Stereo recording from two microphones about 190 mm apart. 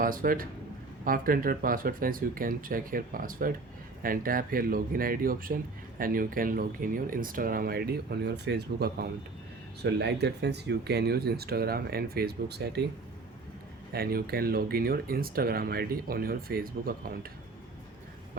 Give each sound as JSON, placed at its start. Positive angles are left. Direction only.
{"t": 0.0, "sound": "speech", "side_deg": -50}
{"t": 13.9, "sound": "speech", "side_deg": -55}